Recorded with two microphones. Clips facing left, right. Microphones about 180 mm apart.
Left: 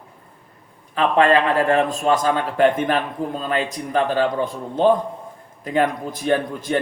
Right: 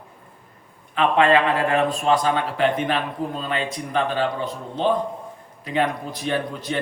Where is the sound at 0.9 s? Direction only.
40° left (ahead or behind).